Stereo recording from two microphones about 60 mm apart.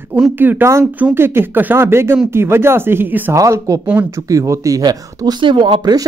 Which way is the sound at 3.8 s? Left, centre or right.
Right.